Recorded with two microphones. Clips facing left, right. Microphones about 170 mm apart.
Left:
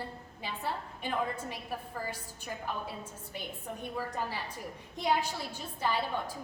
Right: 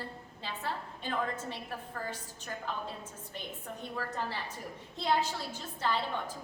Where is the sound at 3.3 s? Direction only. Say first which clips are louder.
Left 2 dB; 10° left (ahead or behind).